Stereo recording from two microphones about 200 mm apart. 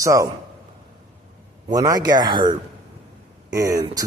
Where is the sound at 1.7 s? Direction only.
15° right (ahead or behind).